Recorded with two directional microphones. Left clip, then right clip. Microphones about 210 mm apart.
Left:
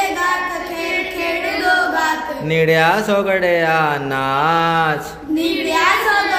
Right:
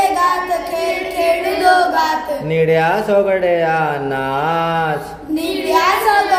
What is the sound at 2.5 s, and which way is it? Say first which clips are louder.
Mantra: even; 5° left (ahead or behind).